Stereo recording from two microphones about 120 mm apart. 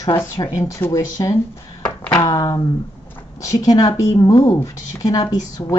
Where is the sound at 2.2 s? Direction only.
40° left (ahead or behind).